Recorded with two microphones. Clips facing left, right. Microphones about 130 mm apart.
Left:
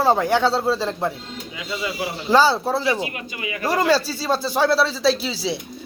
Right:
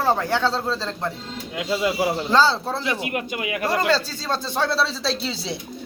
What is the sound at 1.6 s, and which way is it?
Speech, 60° right (ahead or behind).